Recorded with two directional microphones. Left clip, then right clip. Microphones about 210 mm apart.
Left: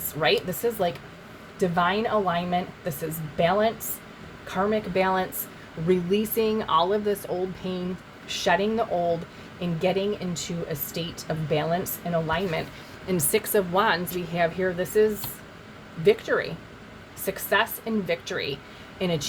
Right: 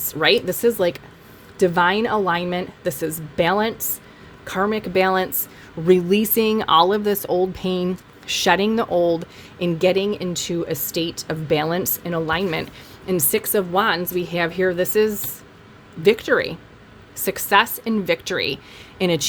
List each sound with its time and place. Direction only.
0.1 s speech: 50° right (ahead or behind)
13.1 s a woman's voice: 30° right (ahead or behind); by 19.2 s 50° right (ahead or behind)